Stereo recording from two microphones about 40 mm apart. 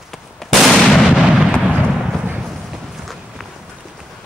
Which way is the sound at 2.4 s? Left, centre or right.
Centre.